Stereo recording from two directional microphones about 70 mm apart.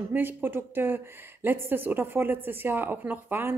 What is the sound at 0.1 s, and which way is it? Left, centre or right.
Speech, right.